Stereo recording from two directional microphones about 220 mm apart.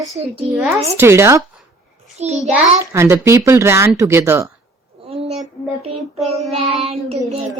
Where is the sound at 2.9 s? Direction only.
10° right (ahead or behind).